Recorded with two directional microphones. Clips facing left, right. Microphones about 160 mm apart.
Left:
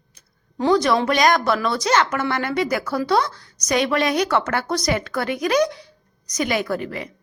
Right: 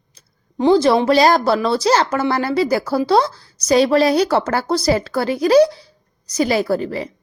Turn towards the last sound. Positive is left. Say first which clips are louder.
# right 6 dB
turn(degrees=-30)  # may be behind; listen again after turning